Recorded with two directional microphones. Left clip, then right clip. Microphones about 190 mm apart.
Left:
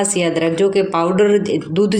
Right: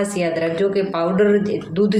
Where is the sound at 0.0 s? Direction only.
35° left (ahead or behind).